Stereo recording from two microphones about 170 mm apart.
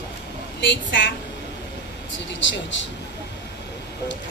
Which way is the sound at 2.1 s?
90° left.